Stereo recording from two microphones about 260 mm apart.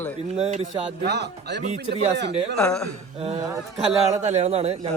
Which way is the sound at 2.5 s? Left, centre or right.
Centre.